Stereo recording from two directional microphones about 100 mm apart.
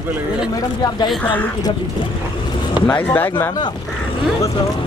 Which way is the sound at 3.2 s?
20° left (ahead or behind).